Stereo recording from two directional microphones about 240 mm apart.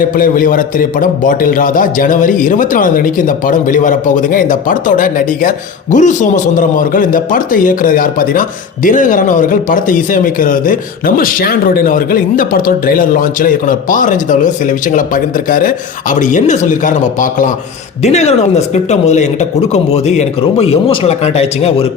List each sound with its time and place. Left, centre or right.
0.0 s a man's voice: left